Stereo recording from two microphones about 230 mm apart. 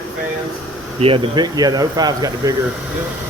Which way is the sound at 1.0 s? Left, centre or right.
Right.